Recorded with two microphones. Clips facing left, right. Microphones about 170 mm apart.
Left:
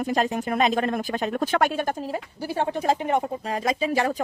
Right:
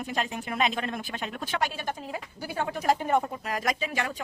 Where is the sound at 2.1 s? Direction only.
30° left (ahead or behind).